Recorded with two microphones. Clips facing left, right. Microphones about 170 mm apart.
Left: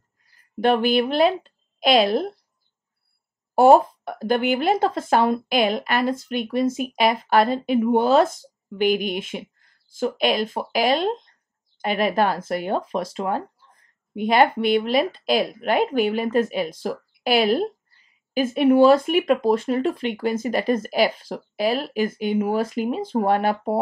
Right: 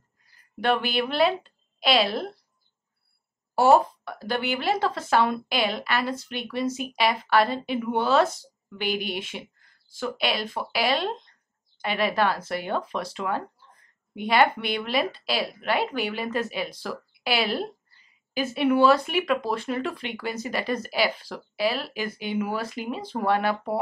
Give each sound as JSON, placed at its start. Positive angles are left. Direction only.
{"t": 0.6, "sound": "speech", "side_deg": 45}
{"t": 3.5, "sound": "speech", "side_deg": 50}